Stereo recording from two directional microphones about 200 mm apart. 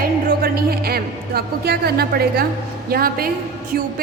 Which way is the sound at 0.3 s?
50° right (ahead or behind).